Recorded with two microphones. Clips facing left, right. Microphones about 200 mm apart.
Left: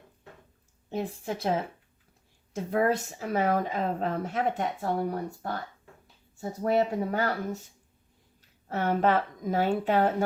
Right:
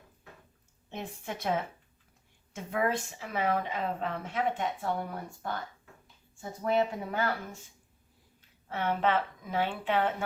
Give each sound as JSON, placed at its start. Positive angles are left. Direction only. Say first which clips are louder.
{"t": 0.9, "sound": "speech", "louder": "left 7 dB", "side_deg": 35}